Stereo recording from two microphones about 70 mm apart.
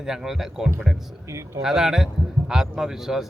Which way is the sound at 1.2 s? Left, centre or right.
Right.